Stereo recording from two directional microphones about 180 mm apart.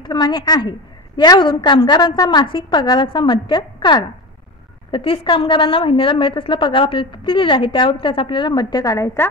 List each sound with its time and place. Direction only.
0.0 s a woman's voice: 25° left (ahead or behind)